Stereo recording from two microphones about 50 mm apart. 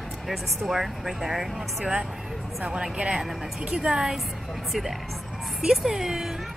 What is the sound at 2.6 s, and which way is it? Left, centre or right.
A woman's voice, centre.